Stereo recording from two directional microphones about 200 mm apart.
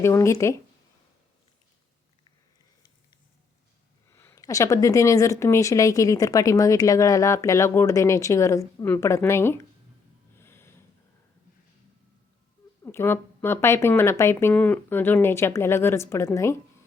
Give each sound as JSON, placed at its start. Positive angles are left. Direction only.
{"t": 0.0, "sound": "a woman's voice", "side_deg": 15}
{"t": 4.1, "sound": "a woman's voice", "side_deg": 10}
{"t": 10.3, "sound": "snort", "side_deg": 10}
{"t": 12.8, "sound": "a woman's voice", "side_deg": 10}